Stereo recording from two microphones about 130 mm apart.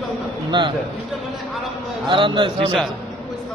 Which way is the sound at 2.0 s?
40° right (ahead or behind).